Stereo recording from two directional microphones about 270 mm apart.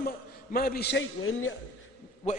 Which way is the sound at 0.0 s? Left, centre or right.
Left.